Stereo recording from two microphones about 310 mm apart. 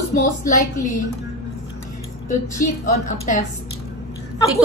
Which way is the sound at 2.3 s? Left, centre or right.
Left.